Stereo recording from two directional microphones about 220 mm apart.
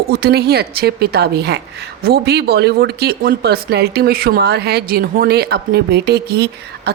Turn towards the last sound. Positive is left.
turn(degrees=-45)  # may be behind; listen again after turning